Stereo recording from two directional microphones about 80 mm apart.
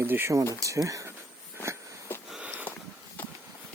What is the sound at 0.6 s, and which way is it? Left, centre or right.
Speech, right.